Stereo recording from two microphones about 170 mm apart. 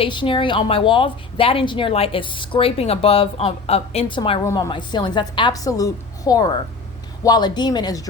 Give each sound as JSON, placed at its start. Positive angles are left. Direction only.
{"t": 0.0, "sound": "a woman's voice", "side_deg": 30}